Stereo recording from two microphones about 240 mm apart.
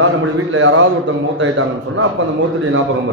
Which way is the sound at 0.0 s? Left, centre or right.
Right.